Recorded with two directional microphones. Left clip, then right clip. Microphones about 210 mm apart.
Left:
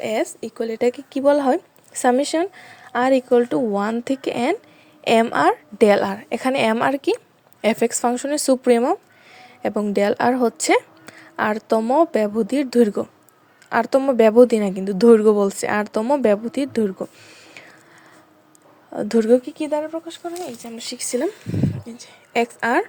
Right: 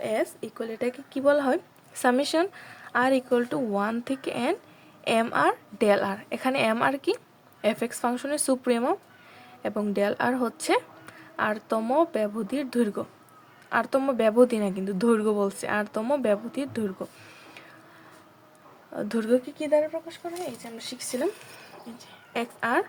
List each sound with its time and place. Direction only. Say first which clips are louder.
0.0 s speech: left 5 dB; 30° left (ahead or behind)
17.2 s a sound: left 4 dB; 30° left (ahead or behind)
18.9 s speech: left 9 dB; 30° left (ahead or behind)
21.9 s speech: left 9 dB; 30° left (ahead or behind)